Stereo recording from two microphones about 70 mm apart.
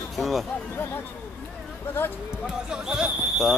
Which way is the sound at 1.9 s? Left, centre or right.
Left.